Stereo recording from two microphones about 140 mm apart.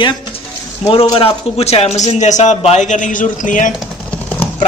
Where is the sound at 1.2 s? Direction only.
45° left (ahead or behind).